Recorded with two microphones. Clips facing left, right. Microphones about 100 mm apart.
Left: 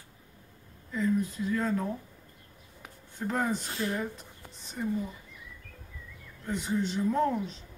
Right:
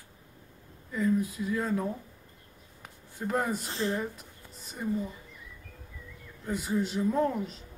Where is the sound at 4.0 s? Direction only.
5° right (ahead or behind).